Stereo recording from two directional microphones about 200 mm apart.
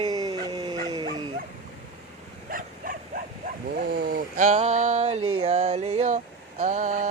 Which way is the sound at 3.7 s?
45° right (ahead or behind).